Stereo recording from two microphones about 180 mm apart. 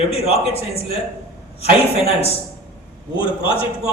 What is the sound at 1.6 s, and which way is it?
Speech, 30° left (ahead or behind).